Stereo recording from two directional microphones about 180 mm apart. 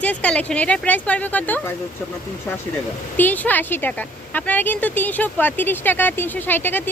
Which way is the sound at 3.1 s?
10° left (ahead or behind).